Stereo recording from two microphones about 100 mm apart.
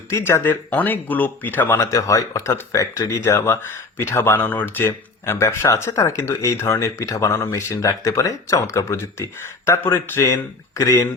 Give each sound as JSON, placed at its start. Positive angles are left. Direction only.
{"t": 0.1, "sound": "speech", "side_deg": 25}